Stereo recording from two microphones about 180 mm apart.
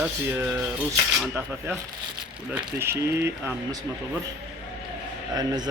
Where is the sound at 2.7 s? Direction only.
15° right (ahead or behind).